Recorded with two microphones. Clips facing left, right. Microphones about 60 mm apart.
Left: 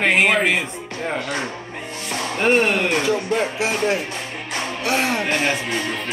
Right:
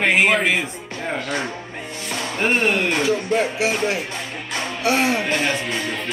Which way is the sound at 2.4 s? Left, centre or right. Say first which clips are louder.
Left 2 dB; centre.